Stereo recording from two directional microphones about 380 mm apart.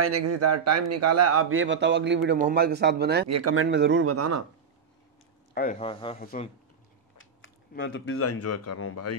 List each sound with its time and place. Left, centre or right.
0.0 s a man's voice: right
3.3 s speech: right
5.5 s speech: left
7.2 s speech: left